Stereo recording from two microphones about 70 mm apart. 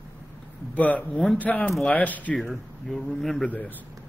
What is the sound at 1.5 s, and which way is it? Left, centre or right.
Speech, left.